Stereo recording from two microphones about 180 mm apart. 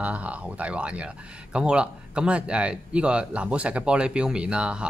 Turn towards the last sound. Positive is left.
turn(degrees=-5)  # may be behind; listen again after turning